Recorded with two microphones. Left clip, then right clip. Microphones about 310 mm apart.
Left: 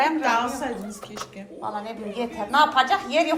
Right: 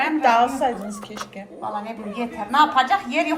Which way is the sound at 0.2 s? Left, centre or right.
Right.